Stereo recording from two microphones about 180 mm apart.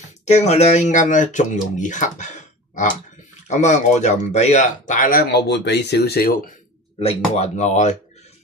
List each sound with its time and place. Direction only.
0.2 s speech: 40° left (ahead or behind)
5.3 s speech: 70° left (ahead or behind)
7.0 s speech: 35° left (ahead or behind)